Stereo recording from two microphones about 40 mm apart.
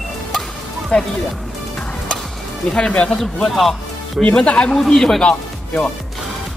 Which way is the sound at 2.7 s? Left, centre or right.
Left.